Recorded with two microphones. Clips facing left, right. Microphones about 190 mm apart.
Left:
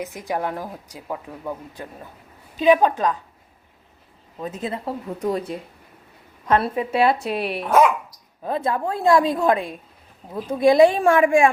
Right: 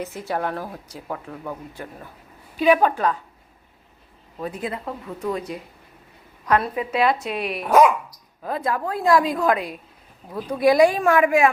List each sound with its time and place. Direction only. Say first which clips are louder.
0.0 s speech: even; 15° left (ahead or behind)
4.4 s speech: left 1 dB; 25° left (ahead or behind)
6.4 s a woman's voice: left 1 dB; 30° left (ahead or behind)
7.6 s speech: right 2 dB; centre (ahead or behind)
8.4 s speech: left 2 dB; 25° left (ahead or behind)